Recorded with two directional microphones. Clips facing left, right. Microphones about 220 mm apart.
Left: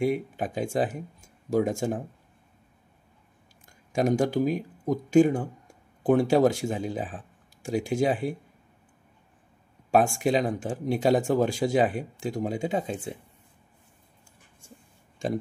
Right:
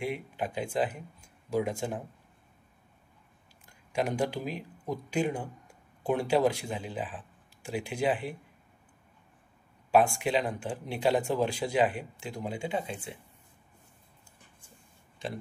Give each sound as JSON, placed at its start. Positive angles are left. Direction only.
{"t": 0.0, "sound": "speech", "side_deg": 45}
{"t": 3.9, "sound": "speech", "side_deg": 45}
{"t": 10.0, "sound": "speech", "side_deg": 45}